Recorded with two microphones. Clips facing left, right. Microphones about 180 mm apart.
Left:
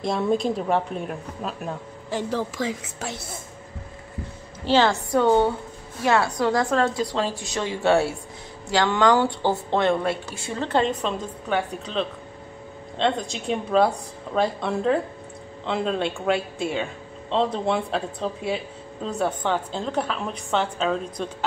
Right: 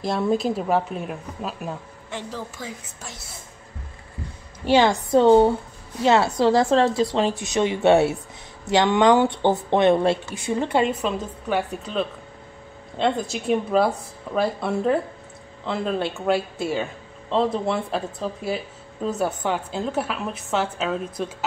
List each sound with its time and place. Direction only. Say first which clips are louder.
0.0 s speech: even; centre (ahead or behind)
2.3 s a woman's voice: left 7 dB; 80° left
4.6 s a woman's voice: right 2 dB; 15° right (ahead or behind)